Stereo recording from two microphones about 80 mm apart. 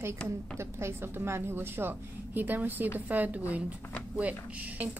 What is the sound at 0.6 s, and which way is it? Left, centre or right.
A woman's voice, right.